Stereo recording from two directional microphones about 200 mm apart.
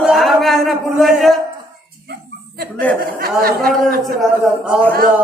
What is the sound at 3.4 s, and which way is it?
Speech, 45° right (ahead or behind).